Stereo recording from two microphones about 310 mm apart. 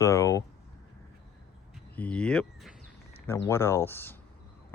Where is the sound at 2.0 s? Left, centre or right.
Centre.